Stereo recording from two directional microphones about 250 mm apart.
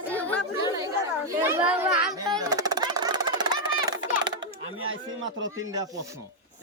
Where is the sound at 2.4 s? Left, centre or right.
Centre.